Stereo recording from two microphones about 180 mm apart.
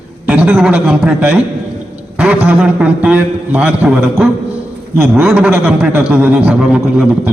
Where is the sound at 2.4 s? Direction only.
5° right (ahead or behind).